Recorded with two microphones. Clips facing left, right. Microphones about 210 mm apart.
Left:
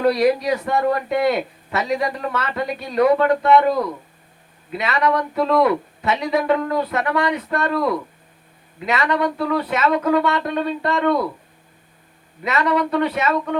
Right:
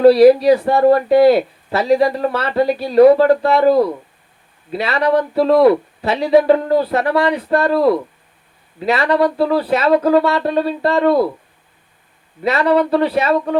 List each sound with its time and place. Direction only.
0.0 s speech: 35° right (ahead or behind)
12.4 s speech: 35° right (ahead or behind)